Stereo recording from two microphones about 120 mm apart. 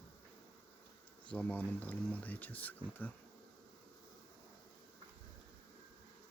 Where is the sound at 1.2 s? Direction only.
10° left (ahead or behind).